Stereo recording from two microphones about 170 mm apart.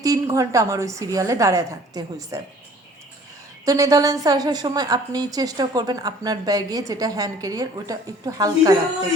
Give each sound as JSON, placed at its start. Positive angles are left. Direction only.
{"t": 0.0, "sound": "a woman's voice", "side_deg": -20}
{"t": 3.7, "sound": "a woman's voice", "side_deg": -20}